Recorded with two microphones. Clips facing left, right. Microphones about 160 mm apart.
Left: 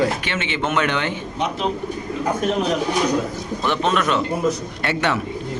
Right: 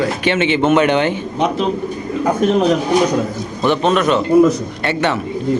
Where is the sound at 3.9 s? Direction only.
Centre (ahead or behind).